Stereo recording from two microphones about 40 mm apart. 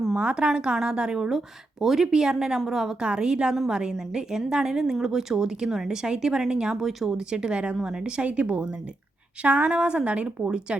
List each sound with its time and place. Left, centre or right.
0.2 s a woman's voice: right; by 7.2 s centre
7.2 s a woman's voice: centre
8.3 s a woman's voice: right